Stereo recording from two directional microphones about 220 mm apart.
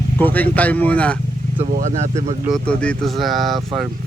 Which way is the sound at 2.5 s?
5° left (ahead or behind).